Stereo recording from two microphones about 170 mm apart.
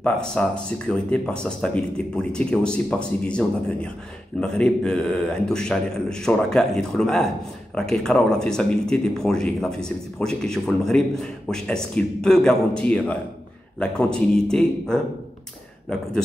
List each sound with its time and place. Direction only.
0.0 s speech: 5° left (ahead or behind)